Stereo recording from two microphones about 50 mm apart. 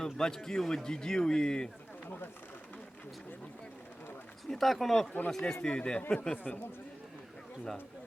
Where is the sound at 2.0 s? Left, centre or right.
Left.